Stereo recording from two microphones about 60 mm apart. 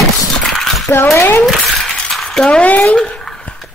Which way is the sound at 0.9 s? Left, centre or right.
Left.